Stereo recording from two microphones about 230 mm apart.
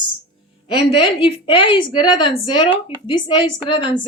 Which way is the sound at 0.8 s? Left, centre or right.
Left.